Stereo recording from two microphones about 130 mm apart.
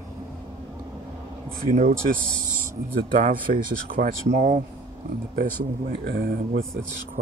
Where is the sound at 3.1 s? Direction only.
90° right; by 4.6 s 70° right (ahead or behind).